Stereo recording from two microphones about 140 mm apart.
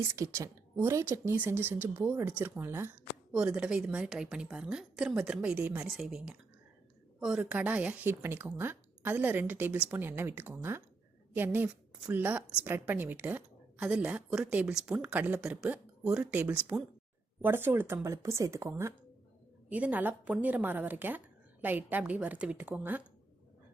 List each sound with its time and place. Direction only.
0.2 s a woman's voice: 20° right (ahead or behind)